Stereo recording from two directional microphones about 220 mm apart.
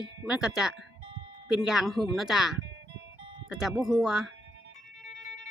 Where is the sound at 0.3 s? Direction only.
5° right (ahead or behind).